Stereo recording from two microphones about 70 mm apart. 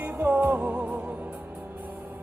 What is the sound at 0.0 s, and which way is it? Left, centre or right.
Music, right.